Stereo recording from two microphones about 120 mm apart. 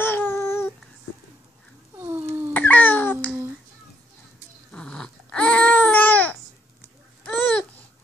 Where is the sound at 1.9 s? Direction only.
20° right (ahead or behind).